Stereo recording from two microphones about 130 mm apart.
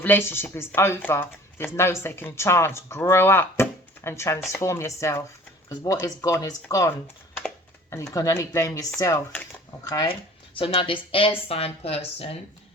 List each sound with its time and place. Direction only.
0.0 s speech: 15° left (ahead or behind)
10.6 s speech: 45° left (ahead or behind)